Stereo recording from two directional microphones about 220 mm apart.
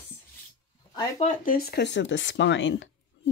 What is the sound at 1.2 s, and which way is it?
Speech, 40° left (ahead or behind).